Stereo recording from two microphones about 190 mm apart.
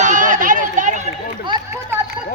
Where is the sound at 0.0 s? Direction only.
40° right (ahead or behind).